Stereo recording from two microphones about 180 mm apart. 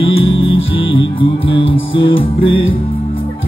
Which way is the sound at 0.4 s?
30° left (ahead or behind).